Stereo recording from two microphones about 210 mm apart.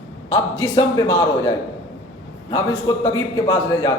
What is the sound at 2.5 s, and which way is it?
A man's voice, 15° left (ahead or behind).